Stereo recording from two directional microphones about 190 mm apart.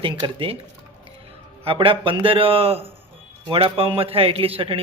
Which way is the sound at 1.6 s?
30° right (ahead or behind).